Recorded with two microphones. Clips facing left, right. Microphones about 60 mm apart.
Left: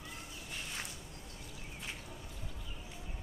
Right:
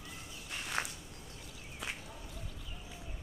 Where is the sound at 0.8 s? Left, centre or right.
Right.